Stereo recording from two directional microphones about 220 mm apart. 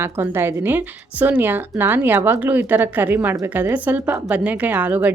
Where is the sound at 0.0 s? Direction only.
10° right (ahead or behind).